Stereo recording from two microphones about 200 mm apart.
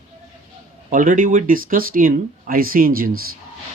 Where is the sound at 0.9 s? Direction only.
40° right (ahead or behind).